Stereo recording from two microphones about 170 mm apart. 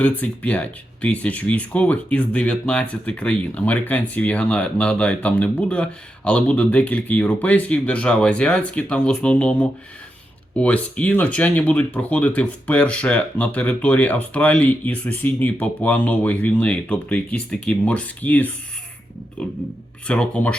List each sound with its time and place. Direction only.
0.0 s speech: 10° left (ahead or behind)
19.4 s a sound: 5° left (ahead or behind)
20.1 s speech: 5° left (ahead or behind)